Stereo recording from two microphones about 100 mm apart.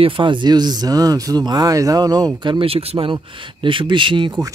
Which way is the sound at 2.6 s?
75° right (ahead or behind).